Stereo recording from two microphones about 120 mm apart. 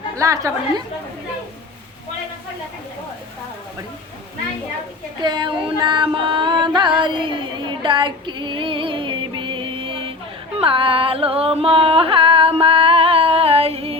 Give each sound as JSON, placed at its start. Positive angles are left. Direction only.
{"t": 0.2, "sound": "a woman's voice", "side_deg": -25}
{"t": 5.2, "sound": "music", "side_deg": -40}
{"t": 7.0, "sound": "female singing", "side_deg": -40}
{"t": 10.6, "sound": "music", "side_deg": -50}